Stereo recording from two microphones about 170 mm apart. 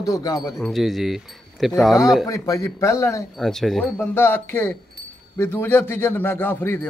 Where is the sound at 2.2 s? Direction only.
20° left (ahead or behind).